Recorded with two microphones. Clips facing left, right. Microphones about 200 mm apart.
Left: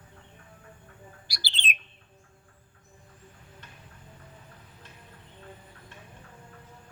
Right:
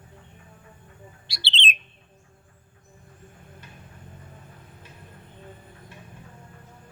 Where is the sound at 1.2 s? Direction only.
25° right (ahead or behind).